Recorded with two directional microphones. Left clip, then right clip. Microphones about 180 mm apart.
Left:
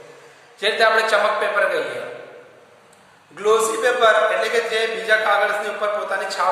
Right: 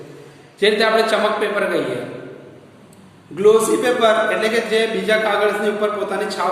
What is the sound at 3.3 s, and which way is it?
Speech, 15° right (ahead or behind).